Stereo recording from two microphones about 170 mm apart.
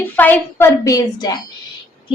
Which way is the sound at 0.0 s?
10° left (ahead or behind).